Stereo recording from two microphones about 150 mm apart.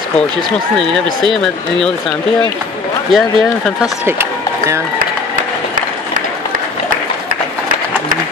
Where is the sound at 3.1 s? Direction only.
Centre (ahead or behind).